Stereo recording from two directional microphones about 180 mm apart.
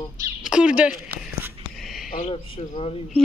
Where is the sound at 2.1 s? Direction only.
35° left (ahead or behind).